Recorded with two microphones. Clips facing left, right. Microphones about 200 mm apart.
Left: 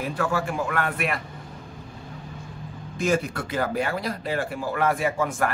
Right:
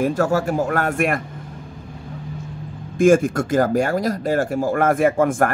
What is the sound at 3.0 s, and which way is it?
Speech, 50° right (ahead or behind).